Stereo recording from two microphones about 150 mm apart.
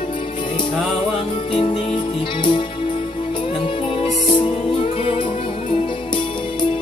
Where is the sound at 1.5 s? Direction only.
35° left (ahead or behind).